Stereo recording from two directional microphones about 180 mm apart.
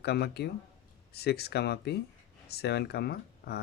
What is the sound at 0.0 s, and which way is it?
Speech, 65° left (ahead or behind).